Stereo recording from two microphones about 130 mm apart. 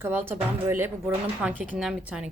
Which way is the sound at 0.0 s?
15° right (ahead or behind).